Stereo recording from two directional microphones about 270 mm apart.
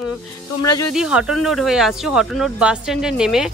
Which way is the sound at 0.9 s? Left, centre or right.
Centre.